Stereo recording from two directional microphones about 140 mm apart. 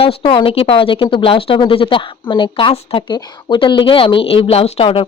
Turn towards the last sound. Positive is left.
turn(degrees=40)  # may be behind; listen again after turning